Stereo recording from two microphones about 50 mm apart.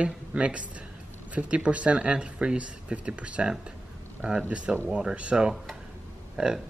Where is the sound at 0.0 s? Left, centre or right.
Right.